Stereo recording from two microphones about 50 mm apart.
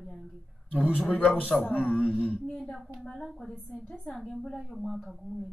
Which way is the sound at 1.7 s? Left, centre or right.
Left.